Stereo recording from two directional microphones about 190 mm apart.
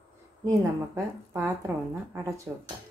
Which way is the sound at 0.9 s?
10° right (ahead or behind).